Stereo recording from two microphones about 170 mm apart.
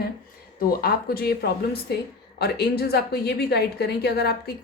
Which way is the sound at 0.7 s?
65° left (ahead or behind).